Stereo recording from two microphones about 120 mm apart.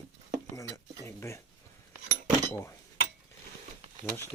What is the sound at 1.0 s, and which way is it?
Speech, 25° left (ahead or behind).